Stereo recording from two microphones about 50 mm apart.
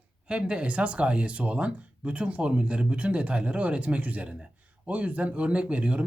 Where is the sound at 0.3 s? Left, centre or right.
Right.